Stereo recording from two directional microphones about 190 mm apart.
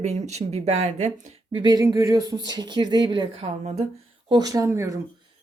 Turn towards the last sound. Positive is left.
turn(degrees=-15)  # may be behind; listen again after turning